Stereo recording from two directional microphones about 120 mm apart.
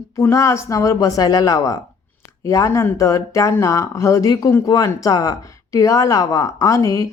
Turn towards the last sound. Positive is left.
turn(degrees=25)  # may be behind; listen again after turning